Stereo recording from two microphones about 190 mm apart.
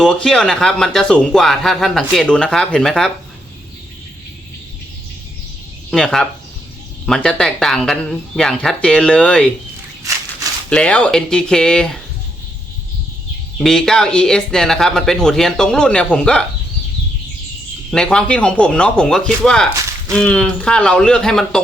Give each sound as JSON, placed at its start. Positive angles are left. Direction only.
{"t": 0.0, "sound": "speech", "side_deg": 5}
{"t": 5.9, "sound": "speech", "side_deg": 5}
{"t": 10.7, "sound": "speech", "side_deg": 5}
{"t": 13.6, "sound": "speech", "side_deg": 0}
{"t": 17.9, "sound": "speech", "side_deg": 5}